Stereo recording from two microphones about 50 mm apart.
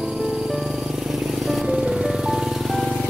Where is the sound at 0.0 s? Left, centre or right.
Centre.